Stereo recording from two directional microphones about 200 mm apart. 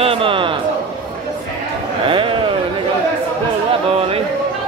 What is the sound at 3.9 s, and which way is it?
Speech, 30° right (ahead or behind).